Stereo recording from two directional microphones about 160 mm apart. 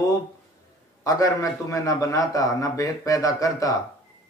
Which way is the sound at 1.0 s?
20° left (ahead or behind).